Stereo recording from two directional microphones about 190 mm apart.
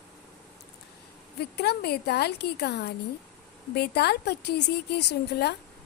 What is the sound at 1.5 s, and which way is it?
A woman's voice, 60° left (ahead or behind).